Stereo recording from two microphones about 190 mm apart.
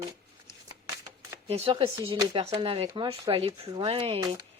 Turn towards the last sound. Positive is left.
turn(degrees=-30)  # may be behind; listen again after turning